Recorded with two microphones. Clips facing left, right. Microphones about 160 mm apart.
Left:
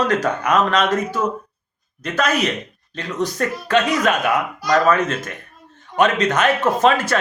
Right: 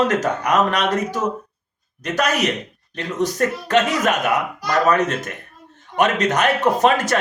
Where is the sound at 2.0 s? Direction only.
15° right (ahead or behind).